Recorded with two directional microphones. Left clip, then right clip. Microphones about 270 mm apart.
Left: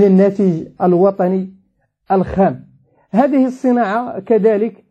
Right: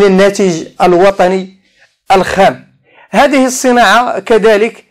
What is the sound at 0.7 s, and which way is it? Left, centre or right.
Speech, right.